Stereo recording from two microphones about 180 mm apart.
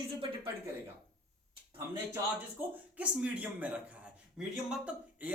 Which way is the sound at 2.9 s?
5° right (ahead or behind).